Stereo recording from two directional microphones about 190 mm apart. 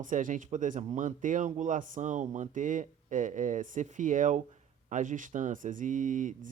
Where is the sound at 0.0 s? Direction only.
45° right (ahead or behind).